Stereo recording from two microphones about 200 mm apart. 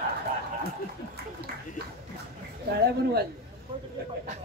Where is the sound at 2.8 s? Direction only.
50° right (ahead or behind).